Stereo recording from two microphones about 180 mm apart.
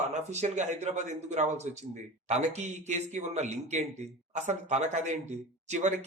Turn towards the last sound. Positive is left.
turn(degrees=-40)  # may be behind; listen again after turning